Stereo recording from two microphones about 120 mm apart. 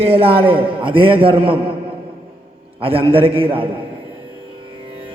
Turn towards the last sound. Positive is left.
turn(degrees=-50)  # may be behind; listen again after turning